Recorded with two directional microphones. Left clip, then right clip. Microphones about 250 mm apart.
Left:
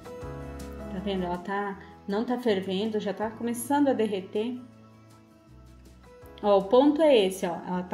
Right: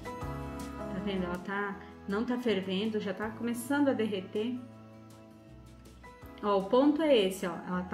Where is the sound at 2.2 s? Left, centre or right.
Left.